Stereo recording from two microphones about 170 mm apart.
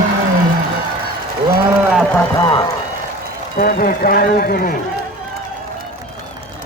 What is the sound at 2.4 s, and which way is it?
Speech, 25° left (ahead or behind).